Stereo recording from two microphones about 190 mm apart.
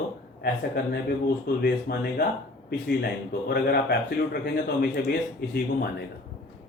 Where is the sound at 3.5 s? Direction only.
55° left (ahead or behind).